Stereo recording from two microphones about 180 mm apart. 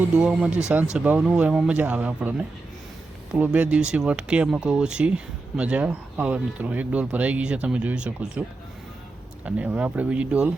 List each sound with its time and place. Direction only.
0.2 s speech: 5° right (ahead or behind)
3.3 s speech: 10° right (ahead or behind)
9.6 s speech: 10° right (ahead or behind)